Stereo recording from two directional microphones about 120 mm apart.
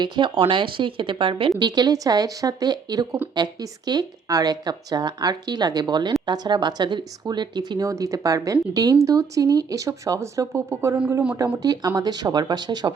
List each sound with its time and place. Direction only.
0.0 s speech: 45° right (ahead or behind); by 10.9 s 20° right (ahead or behind)
11.6 s speech: 35° right (ahead or behind)